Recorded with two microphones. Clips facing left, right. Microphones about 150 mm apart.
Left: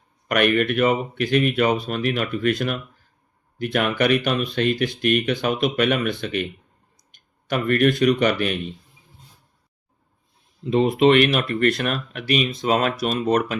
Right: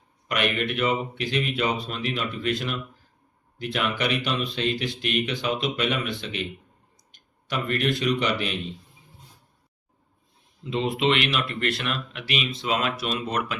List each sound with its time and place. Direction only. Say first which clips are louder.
0.3 s speech: left 7 dB; 50° left (ahead or behind)
10.6 s speech: left 8 dB; 45° left (ahead or behind)